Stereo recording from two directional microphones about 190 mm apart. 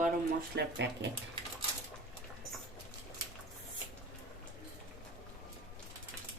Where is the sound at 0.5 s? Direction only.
65° right (ahead or behind).